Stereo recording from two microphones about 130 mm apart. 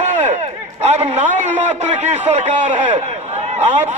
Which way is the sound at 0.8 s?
55° right (ahead or behind).